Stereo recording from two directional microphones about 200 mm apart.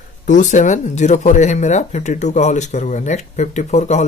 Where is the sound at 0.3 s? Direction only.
40° left (ahead or behind).